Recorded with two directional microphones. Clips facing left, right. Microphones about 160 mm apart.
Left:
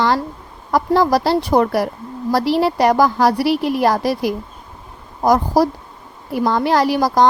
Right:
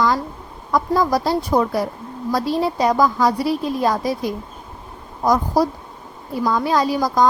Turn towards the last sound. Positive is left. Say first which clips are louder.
# left 3 dB
turn(degrees=75)  # may be behind; listen again after turning